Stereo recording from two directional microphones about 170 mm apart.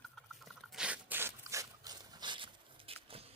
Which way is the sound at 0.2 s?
Centre (ahead or behind).